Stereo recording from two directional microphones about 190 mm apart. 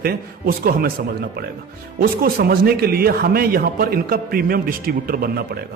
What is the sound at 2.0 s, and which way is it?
A man's voice, 50° right (ahead or behind).